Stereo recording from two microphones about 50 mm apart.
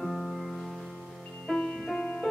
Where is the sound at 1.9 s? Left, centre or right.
Centre.